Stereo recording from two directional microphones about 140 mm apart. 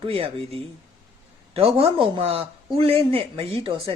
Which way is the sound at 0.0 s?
40° right (ahead or behind).